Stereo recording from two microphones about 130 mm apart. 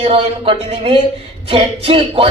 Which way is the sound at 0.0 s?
45° right (ahead or behind).